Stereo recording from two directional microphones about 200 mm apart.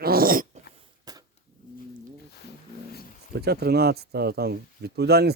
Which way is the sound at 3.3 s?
55° right (ahead or behind).